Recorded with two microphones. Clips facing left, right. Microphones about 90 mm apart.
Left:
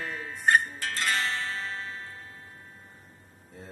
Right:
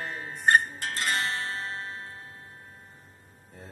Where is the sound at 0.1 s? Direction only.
40° right (ahead or behind).